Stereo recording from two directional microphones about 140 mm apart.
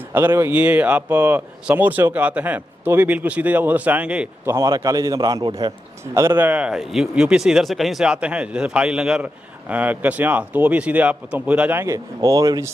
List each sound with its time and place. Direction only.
0.1 s speech: 15° right (ahead or behind)
4.4 s a man's voice: 20° right (ahead or behind)
6.1 s speech: 15° right (ahead or behind)